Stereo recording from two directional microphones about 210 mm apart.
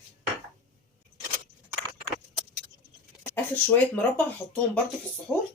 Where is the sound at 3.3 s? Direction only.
10° left (ahead or behind).